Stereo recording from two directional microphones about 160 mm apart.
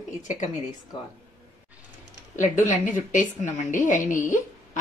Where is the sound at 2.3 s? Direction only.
50° left (ahead or behind).